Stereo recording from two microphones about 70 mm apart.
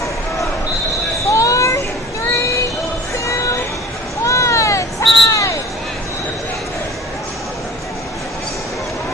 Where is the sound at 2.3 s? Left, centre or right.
Left.